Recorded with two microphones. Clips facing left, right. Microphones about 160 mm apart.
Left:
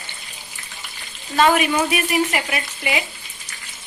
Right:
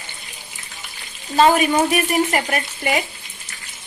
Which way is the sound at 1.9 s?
45° right (ahead or behind).